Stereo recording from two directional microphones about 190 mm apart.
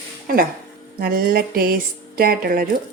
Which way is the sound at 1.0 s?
50° right (ahead or behind).